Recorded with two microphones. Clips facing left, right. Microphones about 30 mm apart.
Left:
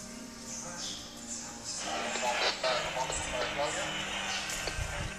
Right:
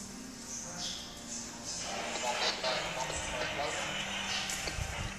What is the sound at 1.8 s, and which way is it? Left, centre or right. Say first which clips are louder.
Music: left 4 dB; centre.